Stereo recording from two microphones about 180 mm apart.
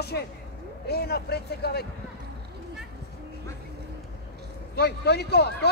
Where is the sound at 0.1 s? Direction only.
65° left (ahead or behind).